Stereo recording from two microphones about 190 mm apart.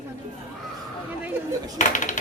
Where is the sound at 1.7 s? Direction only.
40° left (ahead or behind).